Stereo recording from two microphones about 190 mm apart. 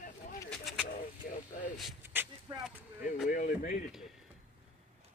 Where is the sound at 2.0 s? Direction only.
10° right (ahead or behind).